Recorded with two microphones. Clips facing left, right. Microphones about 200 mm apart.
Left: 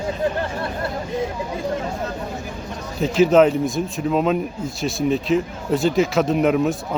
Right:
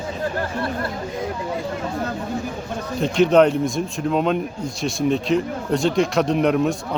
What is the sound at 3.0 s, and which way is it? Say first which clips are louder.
Speech: left 1 dB; 5° left (ahead or behind).